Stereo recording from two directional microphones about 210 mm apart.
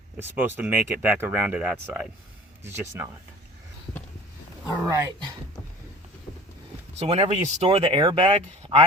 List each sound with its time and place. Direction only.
0.2 s speech: 10° right (ahead or behind)
4.9 s speech: 15° right (ahead or behind)
7.0 s speech: 30° right (ahead or behind)